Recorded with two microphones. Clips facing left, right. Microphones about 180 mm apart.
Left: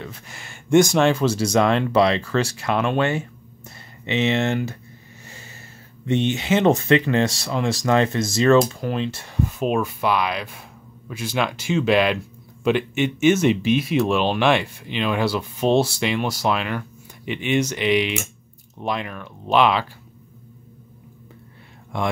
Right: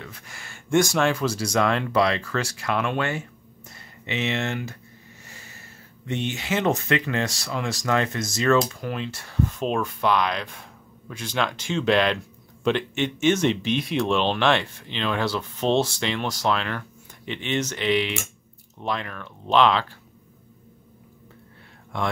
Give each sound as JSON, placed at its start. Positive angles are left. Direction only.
{"t": 0.0, "sound": "speech", "side_deg": 25}
{"t": 6.0, "sound": "speech", "side_deg": 25}
{"t": 9.4, "sound": "speech", "side_deg": 10}